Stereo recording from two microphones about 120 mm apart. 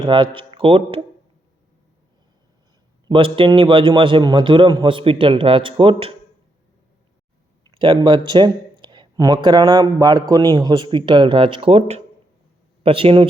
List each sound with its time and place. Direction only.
0.0 s speech: 45° right (ahead or behind)
3.1 s a man's voice: 45° right (ahead or behind)
7.7 s a man's voice: 45° right (ahead or behind)